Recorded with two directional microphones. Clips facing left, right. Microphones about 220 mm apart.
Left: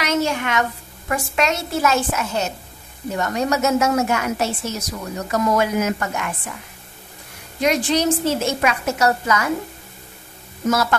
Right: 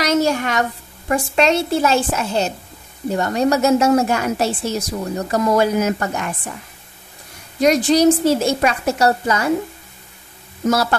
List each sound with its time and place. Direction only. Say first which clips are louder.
0.0 s a woman's voice: right 4 dB; 40° right (ahead or behind)
7.6 s a woman's voice: right 6 dB; 40° right (ahead or behind)
10.7 s a woman's voice: right 2 dB; 35° right (ahead or behind)